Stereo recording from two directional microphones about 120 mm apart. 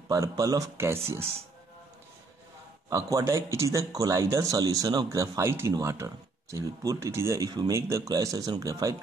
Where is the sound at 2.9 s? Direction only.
25° right (ahead or behind).